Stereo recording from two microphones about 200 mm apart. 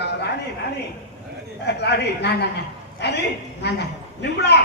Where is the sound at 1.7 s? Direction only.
55° left (ahead or behind).